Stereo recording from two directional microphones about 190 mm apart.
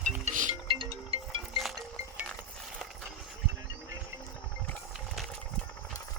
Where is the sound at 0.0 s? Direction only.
40° right (ahead or behind).